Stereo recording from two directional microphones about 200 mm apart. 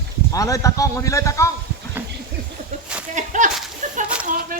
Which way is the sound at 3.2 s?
40° right (ahead or behind).